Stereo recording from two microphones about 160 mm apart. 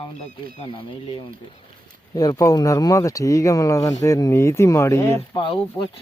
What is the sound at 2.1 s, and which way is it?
Speech, 25° left (ahead or behind).